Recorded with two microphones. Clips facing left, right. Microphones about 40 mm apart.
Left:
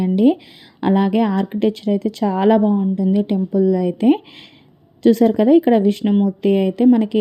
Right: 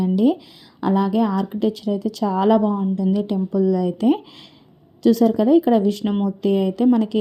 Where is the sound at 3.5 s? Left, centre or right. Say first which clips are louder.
Left 3 dB; centre.